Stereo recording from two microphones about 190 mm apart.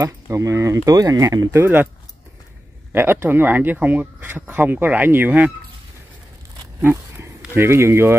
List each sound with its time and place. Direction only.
0.0 s speech: 15° right (ahead or behind)
2.9 s speech: 10° right (ahead or behind)
6.8 s speech: 10° right (ahead or behind)